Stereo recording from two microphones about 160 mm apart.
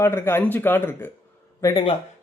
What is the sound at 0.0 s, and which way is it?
Speech, 15° left (ahead or behind).